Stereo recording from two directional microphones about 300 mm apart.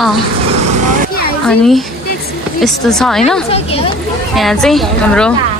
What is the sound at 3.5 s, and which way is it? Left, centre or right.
Speech, centre.